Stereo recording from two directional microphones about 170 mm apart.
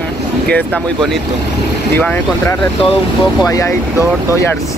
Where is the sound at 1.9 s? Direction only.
10° left (ahead or behind).